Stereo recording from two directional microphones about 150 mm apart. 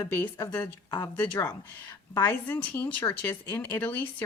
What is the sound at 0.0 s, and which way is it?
A woman's voice, 15° left (ahead or behind).